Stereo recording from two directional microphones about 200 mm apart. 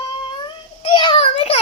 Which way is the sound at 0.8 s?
25° left (ahead or behind).